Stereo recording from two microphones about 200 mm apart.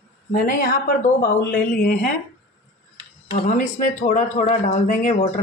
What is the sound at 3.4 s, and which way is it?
A man's voice, 40° left (ahead or behind).